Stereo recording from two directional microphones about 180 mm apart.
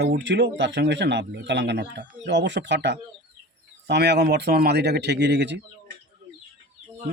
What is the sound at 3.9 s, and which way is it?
Speech, 65° right (ahead or behind).